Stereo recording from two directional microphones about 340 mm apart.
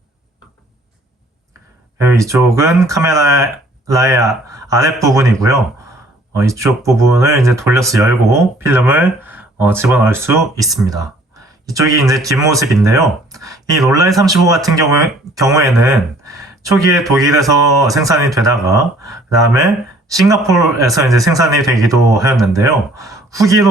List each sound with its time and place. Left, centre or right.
2.0 s speech: centre